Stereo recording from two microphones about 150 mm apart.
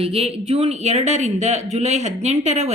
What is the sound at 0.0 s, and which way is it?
Speech, 40° right (ahead or behind).